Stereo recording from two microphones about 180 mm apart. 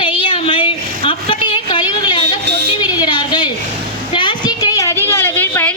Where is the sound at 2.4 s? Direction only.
70° right (ahead or behind).